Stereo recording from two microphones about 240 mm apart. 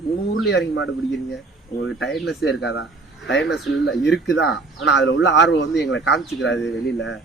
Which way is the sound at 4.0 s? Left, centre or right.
Left.